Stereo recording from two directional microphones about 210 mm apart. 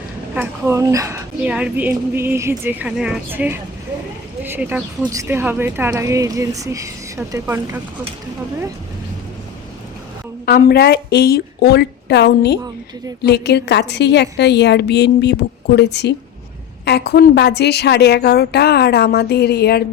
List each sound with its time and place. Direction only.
0.3 s speech: 10° right (ahead or behind)
10.4 s a woman's voice: 50° left (ahead or behind)